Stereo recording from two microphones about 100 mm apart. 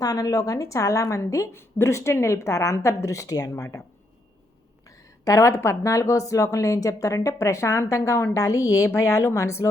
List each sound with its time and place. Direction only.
0.0 s speech: 40° left (ahead or behind)
5.2 s speech: 30° left (ahead or behind)